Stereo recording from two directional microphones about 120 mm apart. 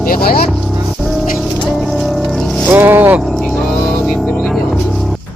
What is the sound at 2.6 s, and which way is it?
Speech, 15° right (ahead or behind).